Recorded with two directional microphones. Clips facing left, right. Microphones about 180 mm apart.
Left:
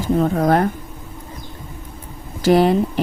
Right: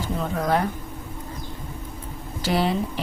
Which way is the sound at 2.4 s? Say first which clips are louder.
Left 9 dB; 50° left (ahead or behind).